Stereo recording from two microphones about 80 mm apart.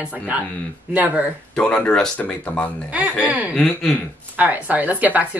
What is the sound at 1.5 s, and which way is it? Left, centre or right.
Speech, centre.